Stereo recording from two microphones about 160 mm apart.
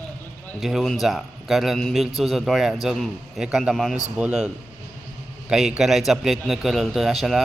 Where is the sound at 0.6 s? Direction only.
Centre (ahead or behind).